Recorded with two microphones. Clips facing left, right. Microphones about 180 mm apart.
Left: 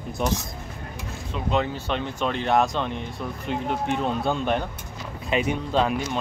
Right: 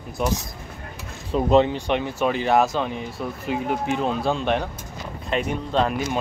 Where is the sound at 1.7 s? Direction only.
15° right (ahead or behind).